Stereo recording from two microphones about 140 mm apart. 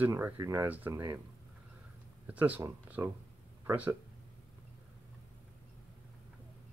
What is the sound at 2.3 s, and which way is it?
Speech, 10° right (ahead or behind).